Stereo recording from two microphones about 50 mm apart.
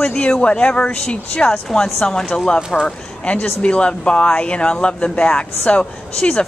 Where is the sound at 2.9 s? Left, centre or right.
Left.